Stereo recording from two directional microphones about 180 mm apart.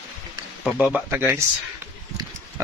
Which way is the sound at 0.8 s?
5° right (ahead or behind).